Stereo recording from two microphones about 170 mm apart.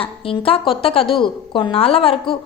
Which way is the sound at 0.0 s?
35° left (ahead or behind).